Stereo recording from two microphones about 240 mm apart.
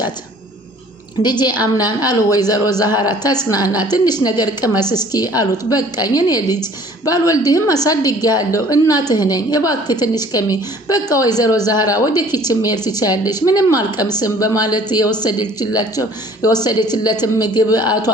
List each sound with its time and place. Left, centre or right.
1.2 s a woman's voice: centre